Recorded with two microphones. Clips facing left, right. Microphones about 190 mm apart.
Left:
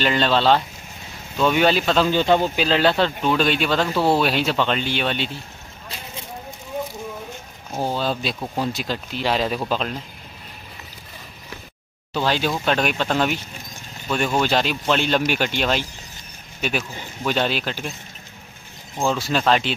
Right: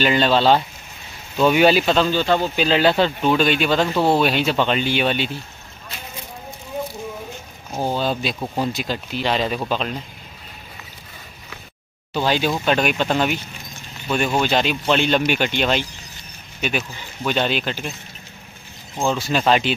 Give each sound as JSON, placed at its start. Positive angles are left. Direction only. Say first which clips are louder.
{"t": 0.0, "sound": "speech", "louder": "right 2 dB", "side_deg": -5}
{"t": 2.0, "sound": "speech", "louder": "left 1 dB", "side_deg": 15}
{"t": 2.5, "sound": "speech", "louder": "right 2 dB", "side_deg": 0}
{"t": 7.7, "sound": "speech", "louder": "right 1 dB", "side_deg": 0}
{"t": 12.1, "sound": "speech", "louder": "right 2 dB", "side_deg": -5}
{"t": 19.0, "sound": "speech", "louder": "right 1 dB", "side_deg": 0}